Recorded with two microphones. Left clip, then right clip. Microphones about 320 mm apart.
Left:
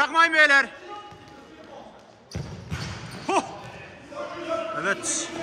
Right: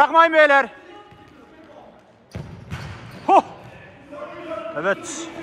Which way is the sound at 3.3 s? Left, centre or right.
Centre.